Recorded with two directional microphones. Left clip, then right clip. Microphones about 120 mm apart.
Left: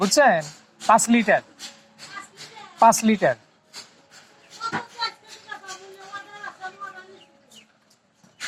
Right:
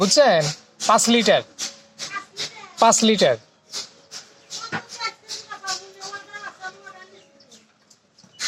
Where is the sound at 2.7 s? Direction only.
35° right (ahead or behind).